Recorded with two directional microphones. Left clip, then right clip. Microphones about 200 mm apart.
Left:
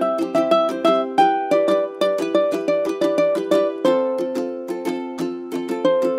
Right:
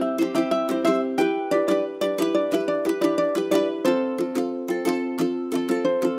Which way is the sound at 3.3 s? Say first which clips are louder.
Left 3 dB; 10° left (ahead or behind).